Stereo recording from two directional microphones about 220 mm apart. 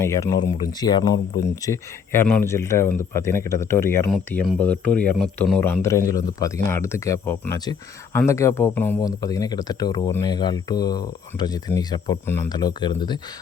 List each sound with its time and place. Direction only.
0.0 s speech: 15° left (ahead or behind)